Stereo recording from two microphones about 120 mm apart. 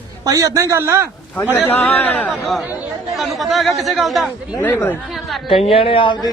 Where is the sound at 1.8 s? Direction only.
10° left (ahead or behind).